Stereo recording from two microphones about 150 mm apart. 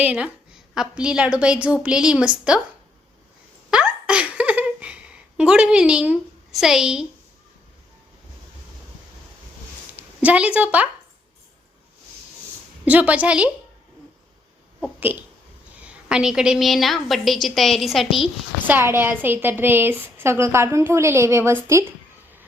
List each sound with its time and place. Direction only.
0.0 s a woman's voice: 10° right (ahead or behind)
3.7 s a sound: 5° right (ahead or behind)
10.2 s a woman's voice: 10° right (ahead or behind)
12.8 s a woman's voice: 10° right (ahead or behind)
15.8 s a woman's voice: 5° right (ahead or behind)
18.7 s a woman's voice: 15° right (ahead or behind)